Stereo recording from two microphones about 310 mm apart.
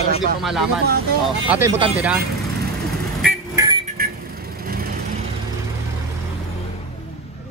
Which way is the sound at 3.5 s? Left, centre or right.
Centre.